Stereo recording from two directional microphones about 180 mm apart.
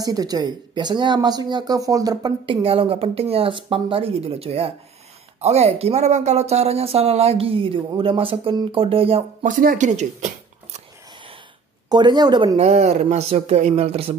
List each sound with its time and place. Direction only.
0.0 s speech: 20° right (ahead or behind); by 10.8 s 40° right (ahead or behind)
11.9 s speech: 25° right (ahead or behind)